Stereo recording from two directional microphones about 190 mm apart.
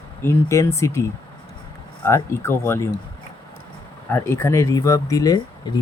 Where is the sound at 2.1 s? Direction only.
15° left (ahead or behind).